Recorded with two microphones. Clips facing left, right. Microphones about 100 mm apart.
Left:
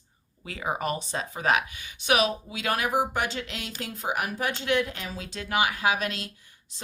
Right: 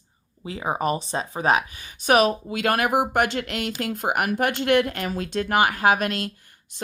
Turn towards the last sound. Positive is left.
turn(degrees=-50)  # may be behind; listen again after turning